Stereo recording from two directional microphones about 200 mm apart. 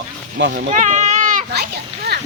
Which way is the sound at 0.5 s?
40° right (ahead or behind).